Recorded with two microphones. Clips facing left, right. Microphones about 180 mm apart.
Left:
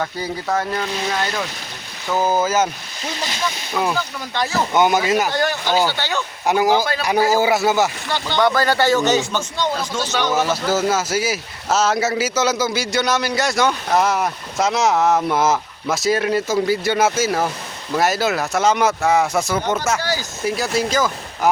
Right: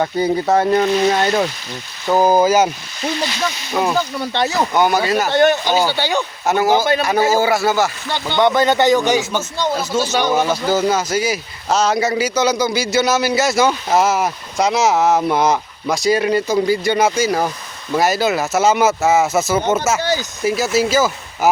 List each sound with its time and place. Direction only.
0.4 s speech: 30° right (ahead or behind)
2.2 s a man's voice: 15° right (ahead or behind)
4.4 s speech: 20° right (ahead or behind)
4.8 s speech: 20° left (ahead or behind)
5.3 s a man's voice: 20° right (ahead or behind)
6.4 s speech: 10° left (ahead or behind)
6.7 s speech: 20° right (ahead or behind)
7.4 s speech: 20° left (ahead or behind)
8.4 s a man's voice: 20° right (ahead or behind)
10.3 s speech: 5° left (ahead or behind)
20.0 s speech: 20° right (ahead or behind)
20.4 s speech: 5° right (ahead or behind)